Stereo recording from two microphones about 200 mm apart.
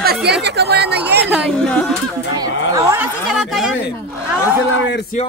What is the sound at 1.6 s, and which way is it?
Speech, 5° left (ahead or behind).